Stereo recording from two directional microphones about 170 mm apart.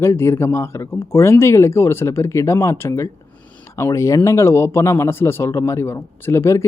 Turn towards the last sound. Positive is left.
turn(degrees=15)  # may be behind; listen again after turning